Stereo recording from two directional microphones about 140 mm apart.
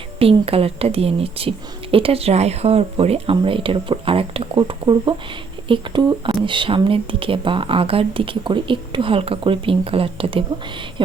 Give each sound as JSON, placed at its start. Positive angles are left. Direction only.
{"t": 0.2, "sound": "a woman's voice", "side_deg": -45}